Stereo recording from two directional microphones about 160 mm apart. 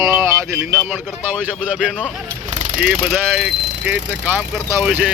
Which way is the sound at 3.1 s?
10° right (ahead or behind).